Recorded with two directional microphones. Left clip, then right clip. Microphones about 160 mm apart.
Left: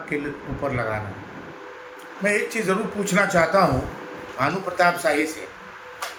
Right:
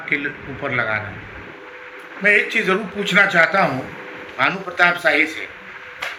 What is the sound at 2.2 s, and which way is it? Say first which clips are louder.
A man's voice: right 7 dB; 20° left (ahead or behind).